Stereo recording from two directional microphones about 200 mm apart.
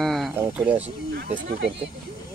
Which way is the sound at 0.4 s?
5° right (ahead or behind).